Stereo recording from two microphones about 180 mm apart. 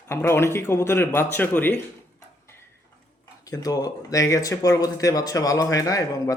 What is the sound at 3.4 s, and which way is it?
Speech, 20° left (ahead or behind).